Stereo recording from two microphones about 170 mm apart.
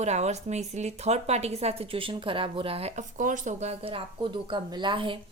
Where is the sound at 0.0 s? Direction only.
40° right (ahead or behind).